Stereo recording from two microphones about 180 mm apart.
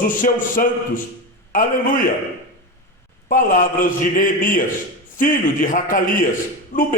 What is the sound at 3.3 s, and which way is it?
Speech, 50° left (ahead or behind).